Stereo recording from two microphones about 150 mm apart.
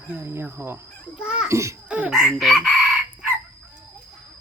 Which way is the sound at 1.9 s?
10° right (ahead or behind).